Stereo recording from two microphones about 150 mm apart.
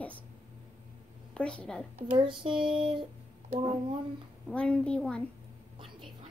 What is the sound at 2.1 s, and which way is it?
Speech, 35° right (ahead or behind).